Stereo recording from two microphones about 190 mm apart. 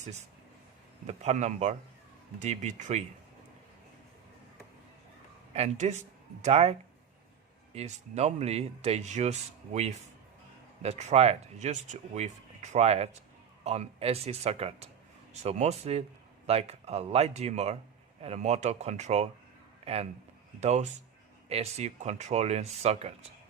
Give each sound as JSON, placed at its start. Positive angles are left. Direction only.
{"t": 0.0, "sound": "speech", "side_deg": -35}
{"t": 5.5, "sound": "a man's voice", "side_deg": -35}